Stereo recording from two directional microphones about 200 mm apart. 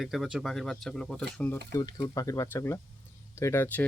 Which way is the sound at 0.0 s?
Centre (ahead or behind).